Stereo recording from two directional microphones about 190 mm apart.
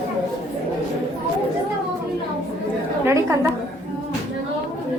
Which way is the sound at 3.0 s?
15° right (ahead or behind).